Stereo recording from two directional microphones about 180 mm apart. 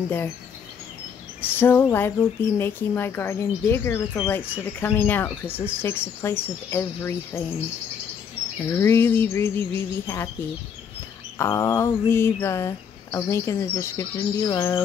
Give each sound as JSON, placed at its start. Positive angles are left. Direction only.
{"t": 1.4, "sound": "speech", "side_deg": 10}
{"t": 8.7, "sound": "speech", "side_deg": 10}
{"t": 11.3, "sound": "speech", "side_deg": 15}